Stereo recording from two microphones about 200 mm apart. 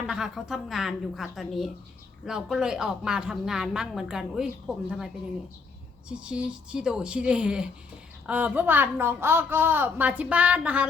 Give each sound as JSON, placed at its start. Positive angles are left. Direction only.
{"t": 0.1, "sound": "a woman's voice", "side_deg": 0}